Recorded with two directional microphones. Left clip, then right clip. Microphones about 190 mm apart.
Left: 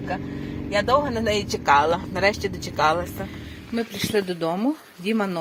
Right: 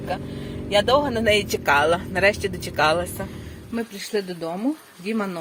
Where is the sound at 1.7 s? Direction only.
15° right (ahead or behind).